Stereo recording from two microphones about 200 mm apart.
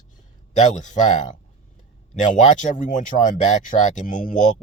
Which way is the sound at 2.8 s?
40° left (ahead or behind).